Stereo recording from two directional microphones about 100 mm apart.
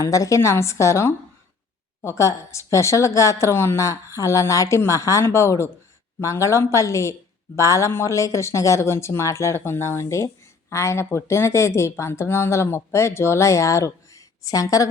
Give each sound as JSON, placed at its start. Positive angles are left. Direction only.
{"t": 0.0, "sound": "a woman's voice", "side_deg": 30}